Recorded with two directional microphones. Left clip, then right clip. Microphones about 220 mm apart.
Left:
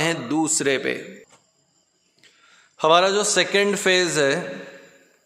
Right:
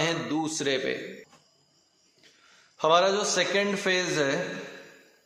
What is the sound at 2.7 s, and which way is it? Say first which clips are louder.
A man's voice: left 5 dB; 45° left (ahead or behind).